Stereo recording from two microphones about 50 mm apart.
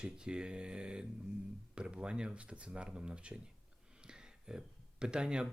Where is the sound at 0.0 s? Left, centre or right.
Centre.